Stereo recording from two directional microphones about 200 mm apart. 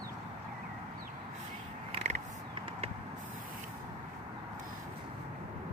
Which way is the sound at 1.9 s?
30° right (ahead or behind).